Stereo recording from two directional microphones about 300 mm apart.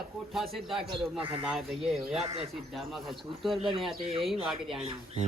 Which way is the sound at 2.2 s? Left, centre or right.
Centre.